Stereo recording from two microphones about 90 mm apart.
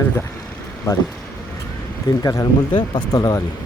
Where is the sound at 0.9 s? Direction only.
30° left (ahead or behind).